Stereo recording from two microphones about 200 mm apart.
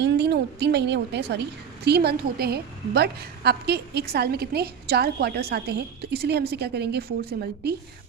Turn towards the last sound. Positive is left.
turn(degrees=-50)  # may be behind; listen again after turning